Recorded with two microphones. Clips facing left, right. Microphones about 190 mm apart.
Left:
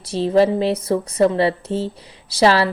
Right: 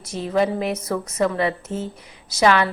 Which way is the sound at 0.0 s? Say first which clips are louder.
Left 6 dB; 30° left (ahead or behind).